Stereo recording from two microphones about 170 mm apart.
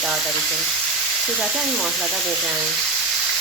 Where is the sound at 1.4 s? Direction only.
Centre (ahead or behind).